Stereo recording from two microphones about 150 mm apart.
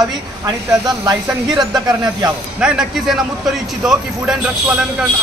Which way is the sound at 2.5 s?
5° right (ahead or behind).